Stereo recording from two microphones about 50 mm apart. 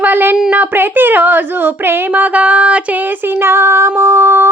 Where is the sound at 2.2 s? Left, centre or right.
Right.